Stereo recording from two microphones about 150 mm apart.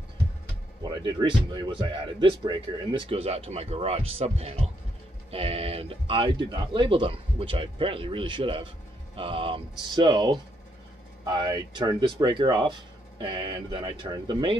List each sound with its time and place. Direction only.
0.8 s speech: 30° right (ahead or behind)